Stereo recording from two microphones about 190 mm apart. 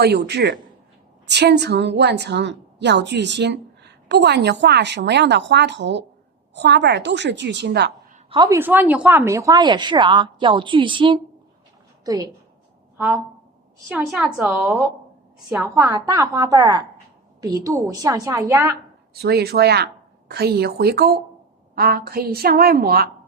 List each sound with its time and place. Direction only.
0.0 s a woman's voice: 60° right (ahead or behind)
8.3 s speech: 20° right (ahead or behind)
13.9 s a woman's voice: 5° right (ahead or behind)
19.2 s a woman's voice: 55° right (ahead or behind)